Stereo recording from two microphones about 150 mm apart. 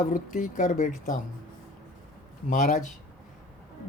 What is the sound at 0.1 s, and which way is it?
Speech, 60° left (ahead or behind).